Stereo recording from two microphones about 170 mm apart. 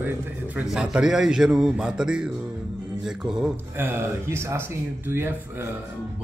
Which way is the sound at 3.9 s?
15° right (ahead or behind).